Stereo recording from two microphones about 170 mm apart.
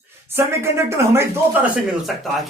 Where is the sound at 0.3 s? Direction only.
15° right (ahead or behind).